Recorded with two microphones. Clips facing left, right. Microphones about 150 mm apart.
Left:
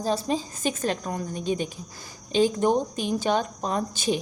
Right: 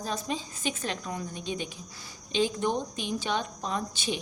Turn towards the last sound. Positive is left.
turn(degrees=45)  # may be behind; listen again after turning